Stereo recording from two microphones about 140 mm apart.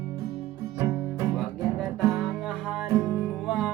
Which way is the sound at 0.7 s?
25° right (ahead or behind).